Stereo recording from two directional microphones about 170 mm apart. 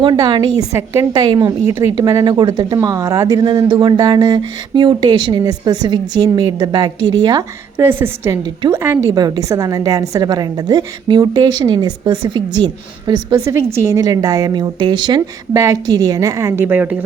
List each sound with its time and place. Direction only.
0.0 s a woman's voice: 25° right (ahead or behind); by 17.0 s 10° right (ahead or behind)